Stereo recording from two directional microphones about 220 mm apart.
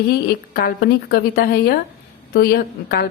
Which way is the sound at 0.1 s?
45° left (ahead or behind).